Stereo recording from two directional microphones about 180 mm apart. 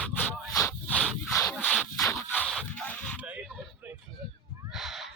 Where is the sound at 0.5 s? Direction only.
15° left (ahead or behind).